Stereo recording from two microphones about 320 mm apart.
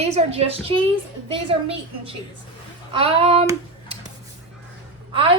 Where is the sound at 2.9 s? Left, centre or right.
Centre.